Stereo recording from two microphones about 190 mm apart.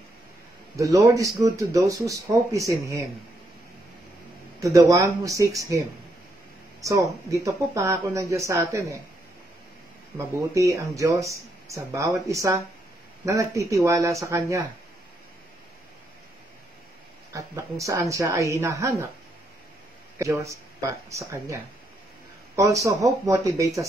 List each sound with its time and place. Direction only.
0.7 s speech: 15° right (ahead or behind)
4.6 s speech: 15° right (ahead or behind)
6.8 s speech: 15° right (ahead or behind)
10.1 s speech: 15° right (ahead or behind)
17.3 s speech: 15° right (ahead or behind)
20.2 s speech: 15° right (ahead or behind)
22.6 s speech: 15° right (ahead or behind)